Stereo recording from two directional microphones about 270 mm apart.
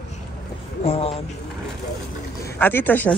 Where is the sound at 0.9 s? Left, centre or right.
Left.